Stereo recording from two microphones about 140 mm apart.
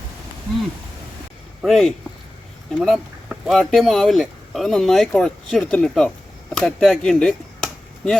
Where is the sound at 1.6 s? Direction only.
Centre (ahead or behind).